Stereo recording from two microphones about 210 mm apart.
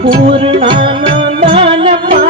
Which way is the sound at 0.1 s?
25° right (ahead or behind).